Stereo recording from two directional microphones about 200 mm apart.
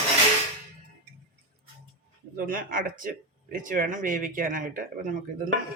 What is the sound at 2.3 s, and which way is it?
Speech, 45° right (ahead or behind).